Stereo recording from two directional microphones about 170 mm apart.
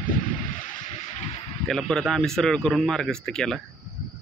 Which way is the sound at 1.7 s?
5° left (ahead or behind).